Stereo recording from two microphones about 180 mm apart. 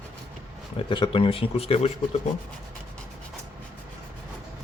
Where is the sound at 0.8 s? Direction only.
25° left (ahead or behind).